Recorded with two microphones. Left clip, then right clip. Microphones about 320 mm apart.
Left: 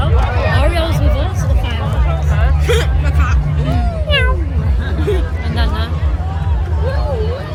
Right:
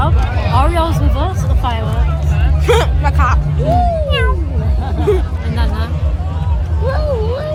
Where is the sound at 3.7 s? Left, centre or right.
Centre.